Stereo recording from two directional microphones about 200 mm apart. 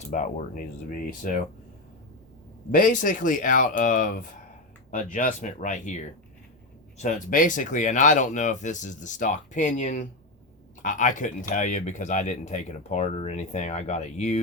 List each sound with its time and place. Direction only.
0.1 s speech: 40° left (ahead or behind)
2.7 s speech: 45° left (ahead or behind)
7.0 s speech: 40° left (ahead or behind)